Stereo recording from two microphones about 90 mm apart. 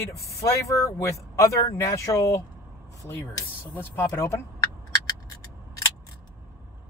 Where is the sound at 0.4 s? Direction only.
35° left (ahead or behind).